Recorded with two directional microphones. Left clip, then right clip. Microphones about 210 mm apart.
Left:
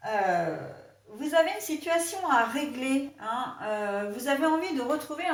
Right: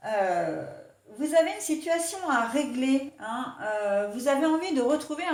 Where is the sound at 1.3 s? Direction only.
40° right (ahead or behind).